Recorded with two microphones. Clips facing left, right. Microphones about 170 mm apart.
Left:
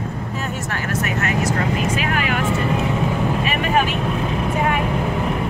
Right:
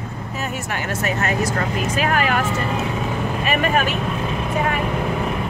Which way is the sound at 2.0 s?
40° right (ahead or behind).